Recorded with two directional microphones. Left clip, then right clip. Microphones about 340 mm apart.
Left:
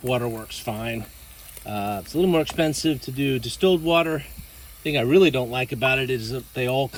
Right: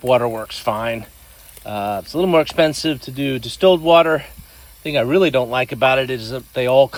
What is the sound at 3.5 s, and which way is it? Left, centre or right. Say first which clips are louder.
Speech: right 8 dB; centre.